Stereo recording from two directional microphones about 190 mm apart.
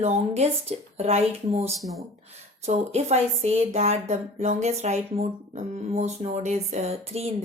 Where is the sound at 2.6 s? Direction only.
35° right (ahead or behind).